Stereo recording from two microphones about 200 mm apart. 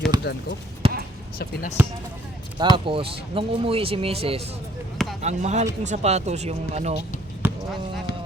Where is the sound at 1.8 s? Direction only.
10° right (ahead or behind).